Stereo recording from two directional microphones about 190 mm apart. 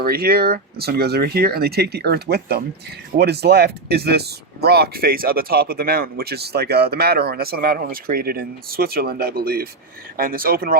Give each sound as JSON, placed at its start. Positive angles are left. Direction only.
{"t": 0.0, "sound": "speech", "side_deg": -50}